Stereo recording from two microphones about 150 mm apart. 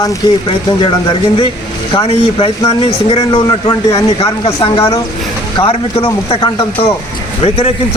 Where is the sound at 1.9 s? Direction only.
40° left (ahead or behind).